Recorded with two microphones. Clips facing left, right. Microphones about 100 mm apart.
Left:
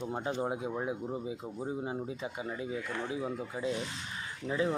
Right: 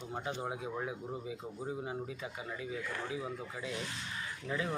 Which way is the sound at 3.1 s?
25° left (ahead or behind).